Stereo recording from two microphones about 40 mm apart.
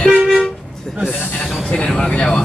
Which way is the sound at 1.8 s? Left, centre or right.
Left.